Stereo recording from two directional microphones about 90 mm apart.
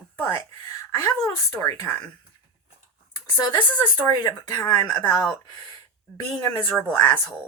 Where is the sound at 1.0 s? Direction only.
35° left (ahead or behind).